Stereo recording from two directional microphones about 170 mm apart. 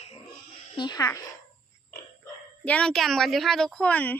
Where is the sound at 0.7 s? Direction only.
25° left (ahead or behind).